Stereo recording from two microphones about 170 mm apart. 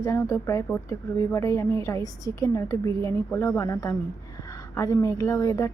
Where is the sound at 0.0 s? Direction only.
15° left (ahead or behind).